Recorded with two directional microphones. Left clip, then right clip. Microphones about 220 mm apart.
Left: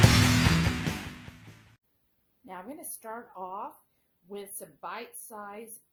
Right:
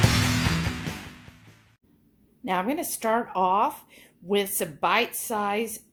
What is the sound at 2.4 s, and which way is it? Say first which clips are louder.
A woman's voice: right 16 dB; 30° right (ahead or behind).